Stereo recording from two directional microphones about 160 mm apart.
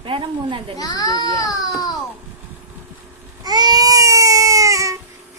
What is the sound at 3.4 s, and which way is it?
Baby cry, 25° right (ahead or behind).